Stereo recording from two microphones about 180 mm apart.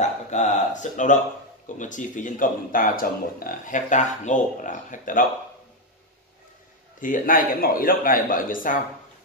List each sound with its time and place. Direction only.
0.0 s a sound: 40° left (ahead or behind)
1.8 s speech: 45° left (ahead or behind)
7.0 s speech: 50° left (ahead or behind)